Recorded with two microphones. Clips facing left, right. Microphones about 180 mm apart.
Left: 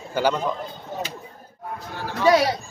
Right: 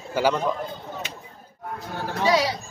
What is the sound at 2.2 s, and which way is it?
Speech, 55° left (ahead or behind).